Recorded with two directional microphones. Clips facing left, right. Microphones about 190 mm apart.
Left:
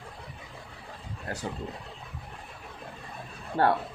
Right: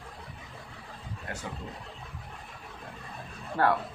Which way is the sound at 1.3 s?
35° left (ahead or behind).